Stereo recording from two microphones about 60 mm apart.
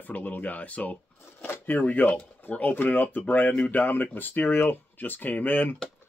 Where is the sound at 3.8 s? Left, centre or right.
Left.